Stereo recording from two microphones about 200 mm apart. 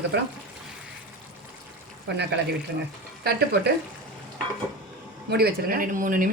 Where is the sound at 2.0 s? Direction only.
60° right (ahead or behind).